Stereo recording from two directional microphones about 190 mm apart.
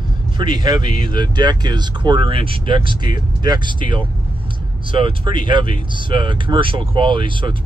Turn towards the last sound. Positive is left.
turn(degrees=-25)  # may be behind; listen again after turning